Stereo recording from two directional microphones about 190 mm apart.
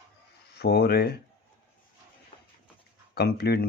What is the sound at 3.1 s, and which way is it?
Speech, 55° left (ahead or behind).